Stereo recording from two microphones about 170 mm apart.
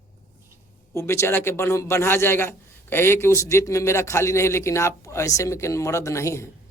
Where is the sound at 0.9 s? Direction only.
15° left (ahead or behind).